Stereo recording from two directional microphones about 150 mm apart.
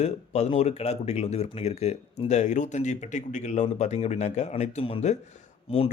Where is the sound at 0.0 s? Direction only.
45° left (ahead or behind).